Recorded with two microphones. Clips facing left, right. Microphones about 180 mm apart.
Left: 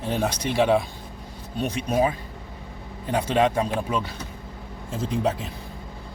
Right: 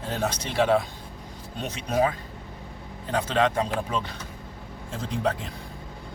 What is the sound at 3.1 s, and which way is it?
Speech, 15° left (ahead or behind).